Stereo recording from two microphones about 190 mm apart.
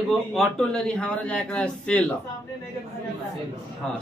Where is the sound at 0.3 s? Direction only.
Centre (ahead or behind).